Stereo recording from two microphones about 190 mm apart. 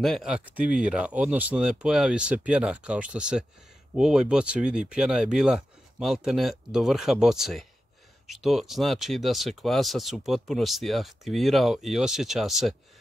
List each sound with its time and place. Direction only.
0.0 s speech: centre (ahead or behind)